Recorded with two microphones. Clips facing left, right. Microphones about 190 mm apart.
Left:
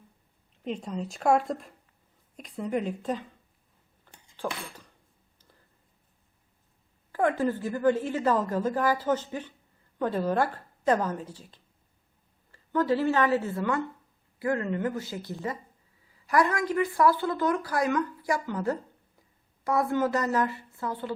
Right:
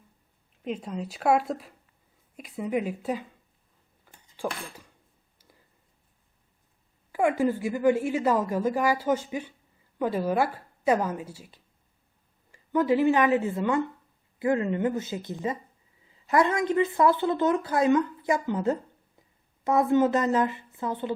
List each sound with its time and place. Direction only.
0.6 s a woman's voice: 5° right (ahead or behind)
4.0 s dishes: 10° right (ahead or behind)
7.1 s a woman's voice: 10° right (ahead or behind)